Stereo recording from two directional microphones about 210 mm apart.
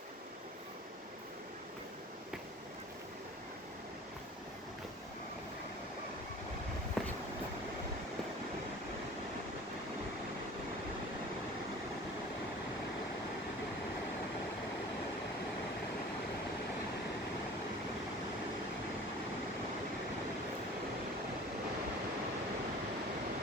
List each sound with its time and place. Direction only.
7.0 s vehicle: centre (ahead or behind)